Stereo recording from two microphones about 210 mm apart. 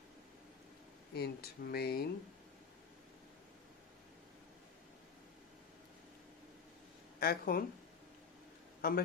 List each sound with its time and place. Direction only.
1.1 s speech: 50° left (ahead or behind)
7.2 s speech: 45° left (ahead or behind)
8.8 s a man's voice: 45° left (ahead or behind)